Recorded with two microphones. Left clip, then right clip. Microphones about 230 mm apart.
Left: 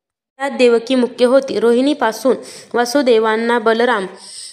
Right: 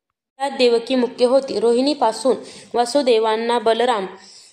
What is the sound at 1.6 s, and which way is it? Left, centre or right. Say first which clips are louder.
Speech: left 3 dB; left.